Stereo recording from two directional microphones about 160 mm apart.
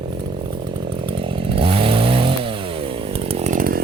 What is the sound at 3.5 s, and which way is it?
Chainsaw, 65° right (ahead or behind).